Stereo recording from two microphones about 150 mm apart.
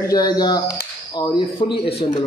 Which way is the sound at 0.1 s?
25° left (ahead or behind).